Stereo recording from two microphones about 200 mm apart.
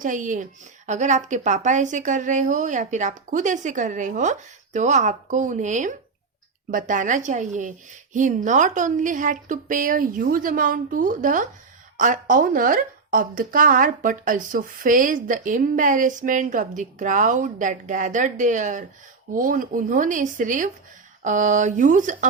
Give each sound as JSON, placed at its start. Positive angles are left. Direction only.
{"t": 0.0, "sound": "speech", "side_deg": -40}